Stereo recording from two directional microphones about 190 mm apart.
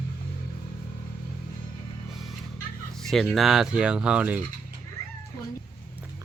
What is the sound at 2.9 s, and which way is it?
Fowl, centre (ahead or behind).